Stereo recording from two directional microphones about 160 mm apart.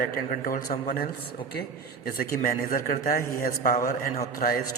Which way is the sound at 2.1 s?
60° left (ahead or behind).